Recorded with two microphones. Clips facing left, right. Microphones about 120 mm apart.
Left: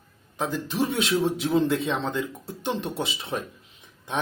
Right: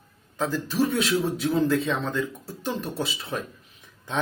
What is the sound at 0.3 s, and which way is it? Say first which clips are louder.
Speech: right 2 dB; 20° left (ahead or behind).